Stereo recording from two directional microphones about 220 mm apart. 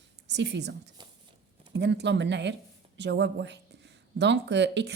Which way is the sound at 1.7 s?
50° right (ahead or behind).